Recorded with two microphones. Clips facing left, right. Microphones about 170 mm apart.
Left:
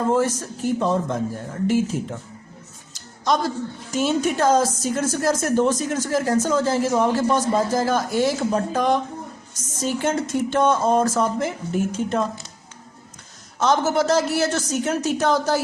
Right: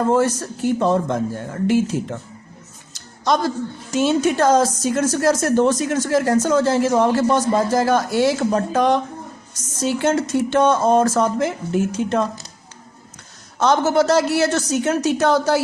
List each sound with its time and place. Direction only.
0.1 s speech: 75° right (ahead or behind)
3.9 s a woman's voice: 85° right
13.6 s a woman's voice: 65° right (ahead or behind)